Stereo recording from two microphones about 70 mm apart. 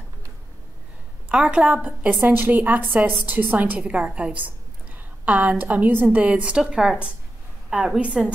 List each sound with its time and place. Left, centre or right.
1.3 s a woman's voice: centre